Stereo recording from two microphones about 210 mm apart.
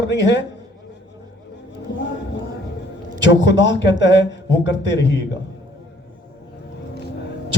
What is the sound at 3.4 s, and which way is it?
A man's voice, 60° left (ahead or behind).